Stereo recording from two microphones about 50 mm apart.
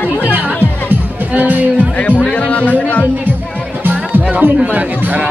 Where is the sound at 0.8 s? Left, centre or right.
Right.